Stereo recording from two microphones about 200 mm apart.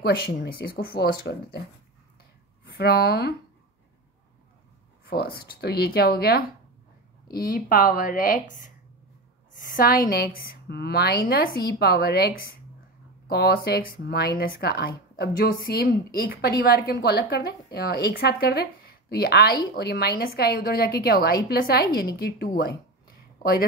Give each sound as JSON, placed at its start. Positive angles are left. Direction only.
{"t": 0.0, "sound": "speech", "side_deg": 50}
{"t": 2.8, "sound": "speech", "side_deg": 50}
{"t": 5.0, "sound": "speech", "side_deg": 50}